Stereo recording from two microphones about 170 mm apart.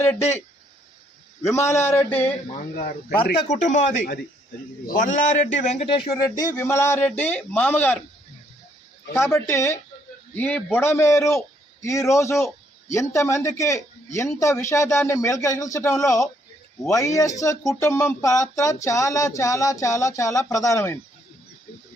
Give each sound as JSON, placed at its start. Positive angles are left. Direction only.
{"t": 0.0, "sound": "speech", "side_deg": 10}
{"t": 1.4, "sound": "speech", "side_deg": 15}
{"t": 3.4, "sound": "speech", "side_deg": 45}
{"t": 6.5, "sound": "speech", "side_deg": 15}
{"t": 9.1, "sound": "a man's voice", "side_deg": 15}